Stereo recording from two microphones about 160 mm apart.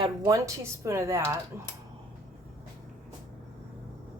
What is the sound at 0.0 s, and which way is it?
Speech, 20° right (ahead or behind).